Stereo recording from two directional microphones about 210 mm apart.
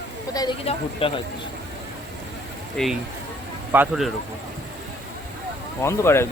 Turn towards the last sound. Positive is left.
turn(degrees=10)  # may be behind; listen again after turning